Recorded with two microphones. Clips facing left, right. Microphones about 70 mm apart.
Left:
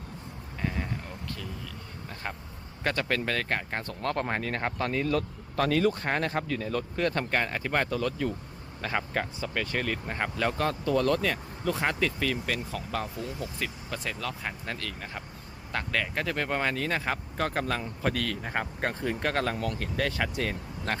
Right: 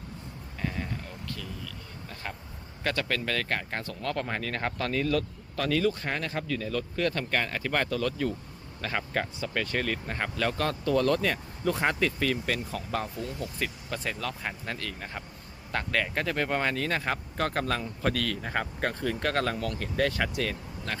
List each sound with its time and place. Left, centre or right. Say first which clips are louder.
0.6 s vehicle: left 1 dB; centre
1.4 s insect: even; left
2.8 s speech: left 1 dB; left
3.6 s speech: left 1 dB; centre
3.8 s speech: left 4 dB; left; by 5.2 s centre
5.5 s speech: left 2 dB; left
7.3 s speech: left 1 dB; centre
20.9 s speech: left 4 dB; left